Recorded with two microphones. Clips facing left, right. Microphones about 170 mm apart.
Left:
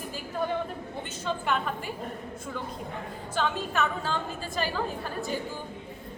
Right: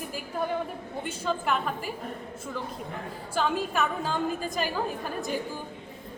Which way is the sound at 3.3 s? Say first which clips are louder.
Right 2 dB; 10° right (ahead or behind).